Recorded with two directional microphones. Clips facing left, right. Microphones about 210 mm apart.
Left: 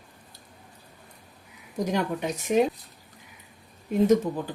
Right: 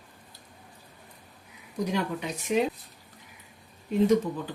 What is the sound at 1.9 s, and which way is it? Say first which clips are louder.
Speech: left 3 dB; 45° left (ahead or behind).